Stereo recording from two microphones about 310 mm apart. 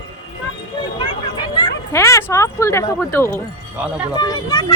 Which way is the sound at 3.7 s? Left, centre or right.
Centre.